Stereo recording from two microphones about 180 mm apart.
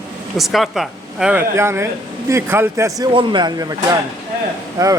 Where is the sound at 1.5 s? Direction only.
15° right (ahead or behind).